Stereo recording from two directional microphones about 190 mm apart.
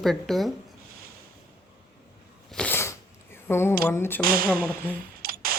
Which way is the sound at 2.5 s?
5° left (ahead or behind).